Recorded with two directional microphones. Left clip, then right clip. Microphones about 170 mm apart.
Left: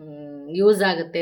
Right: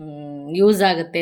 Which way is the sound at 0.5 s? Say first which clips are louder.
Right 2 dB; 25° right (ahead or behind).